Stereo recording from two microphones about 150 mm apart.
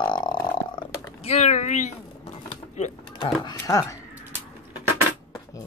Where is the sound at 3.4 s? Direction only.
25° left (ahead or behind).